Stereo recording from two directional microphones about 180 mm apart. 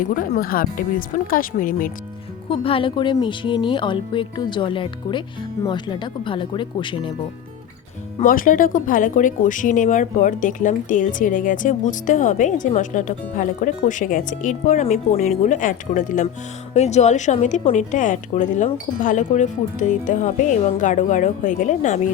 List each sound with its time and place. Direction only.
0.0 s speech: 50° left (ahead or behind)
2.5 s speech: 30° left (ahead or behind)
8.2 s speech: 50° left (ahead or behind)